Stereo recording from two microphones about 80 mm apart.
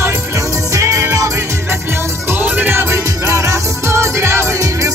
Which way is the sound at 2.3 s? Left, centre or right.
Right.